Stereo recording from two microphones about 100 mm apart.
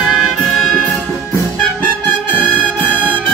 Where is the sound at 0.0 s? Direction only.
5° right (ahead or behind).